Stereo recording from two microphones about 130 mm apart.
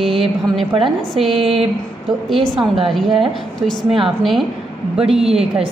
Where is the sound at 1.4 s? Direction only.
50° right (ahead or behind).